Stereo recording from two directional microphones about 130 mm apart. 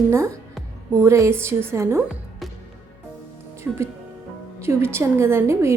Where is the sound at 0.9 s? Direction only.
25° right (ahead or behind).